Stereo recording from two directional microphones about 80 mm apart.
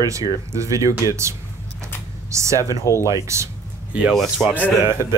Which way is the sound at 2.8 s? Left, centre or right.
Left.